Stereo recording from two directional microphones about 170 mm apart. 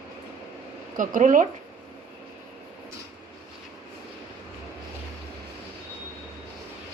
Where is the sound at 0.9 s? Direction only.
50° right (ahead or behind).